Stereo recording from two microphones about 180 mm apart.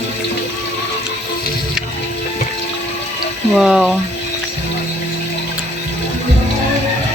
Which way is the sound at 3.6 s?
Centre (ahead or behind).